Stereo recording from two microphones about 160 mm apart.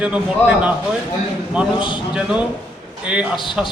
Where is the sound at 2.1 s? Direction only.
5° right (ahead or behind).